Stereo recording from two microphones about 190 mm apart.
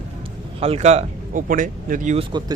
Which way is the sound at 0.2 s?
30° right (ahead or behind).